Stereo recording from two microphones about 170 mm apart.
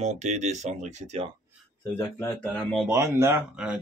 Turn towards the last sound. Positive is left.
turn(degrees=-5)  # may be behind; listen again after turning